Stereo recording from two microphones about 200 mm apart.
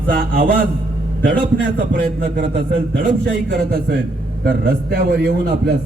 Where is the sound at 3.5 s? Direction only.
50° right (ahead or behind).